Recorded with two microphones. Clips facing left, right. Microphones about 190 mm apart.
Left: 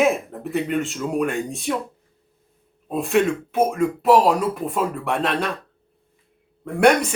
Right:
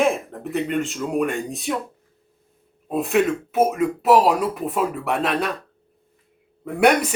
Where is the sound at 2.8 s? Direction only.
Centre (ahead or behind).